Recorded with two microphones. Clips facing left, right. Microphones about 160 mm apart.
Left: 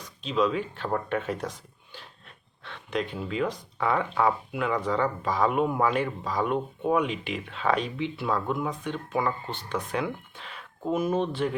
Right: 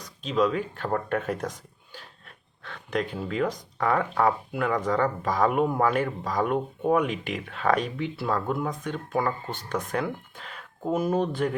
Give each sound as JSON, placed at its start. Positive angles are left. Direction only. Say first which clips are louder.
{"t": 0.0, "sound": "speech", "louder": "right 1 dB", "side_deg": -45}